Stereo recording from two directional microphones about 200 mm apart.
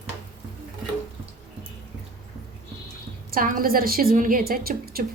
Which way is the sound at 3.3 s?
45° right (ahead or behind).